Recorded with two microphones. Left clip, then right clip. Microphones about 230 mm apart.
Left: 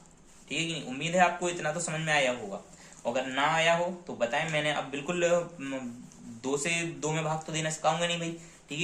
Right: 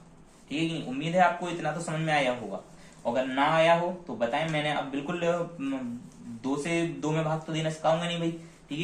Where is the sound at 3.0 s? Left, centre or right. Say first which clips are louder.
Right 2 dB; left.